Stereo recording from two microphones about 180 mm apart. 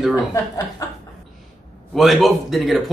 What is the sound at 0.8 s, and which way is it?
Chuckle, 20° left (ahead or behind).